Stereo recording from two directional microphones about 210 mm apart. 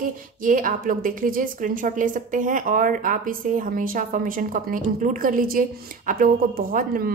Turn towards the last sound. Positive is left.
turn(degrees=-40)  # may be behind; listen again after turning